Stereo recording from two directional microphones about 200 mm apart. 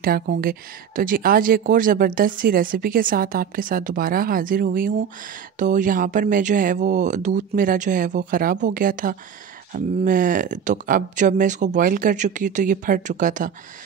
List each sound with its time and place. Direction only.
0.0 s speech: 50° right (ahead or behind)